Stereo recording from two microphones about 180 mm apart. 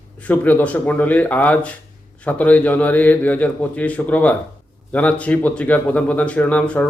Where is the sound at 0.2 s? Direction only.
10° left (ahead or behind).